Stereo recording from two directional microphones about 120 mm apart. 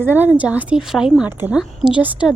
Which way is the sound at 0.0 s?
15° right (ahead or behind).